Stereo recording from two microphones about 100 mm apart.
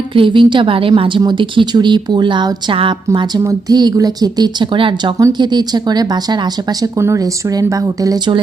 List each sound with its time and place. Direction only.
0.1 s a woman's voice: 55° right (ahead or behind)
3.7 s speech: 45° right (ahead or behind)
5.4 s speech: 45° right (ahead or behind)